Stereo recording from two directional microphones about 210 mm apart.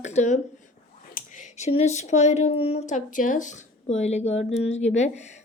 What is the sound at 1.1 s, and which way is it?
Speech, 35° left (ahead or behind).